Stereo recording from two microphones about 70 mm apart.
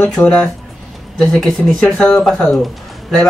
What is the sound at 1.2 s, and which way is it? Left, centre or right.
Speech, centre.